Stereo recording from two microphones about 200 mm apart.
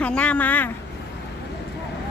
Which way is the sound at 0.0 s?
5° left (ahead or behind).